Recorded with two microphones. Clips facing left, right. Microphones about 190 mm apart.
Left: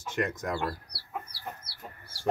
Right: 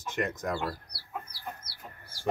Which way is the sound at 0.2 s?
Centre (ahead or behind).